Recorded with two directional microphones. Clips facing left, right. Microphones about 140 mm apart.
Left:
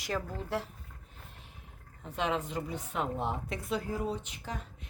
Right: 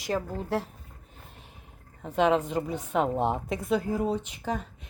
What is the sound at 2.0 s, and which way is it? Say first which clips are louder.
A woman's voice: right 9 dB; 60° right (ahead or behind).